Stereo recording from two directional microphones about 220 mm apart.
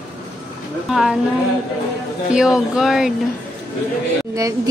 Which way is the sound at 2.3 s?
5° right (ahead or behind).